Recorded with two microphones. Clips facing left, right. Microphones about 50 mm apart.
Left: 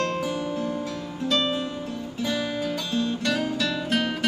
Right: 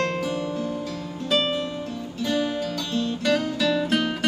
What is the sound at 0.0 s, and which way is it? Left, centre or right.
Music, centre.